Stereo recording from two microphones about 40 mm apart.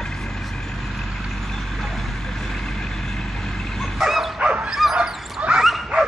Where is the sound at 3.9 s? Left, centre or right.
Centre.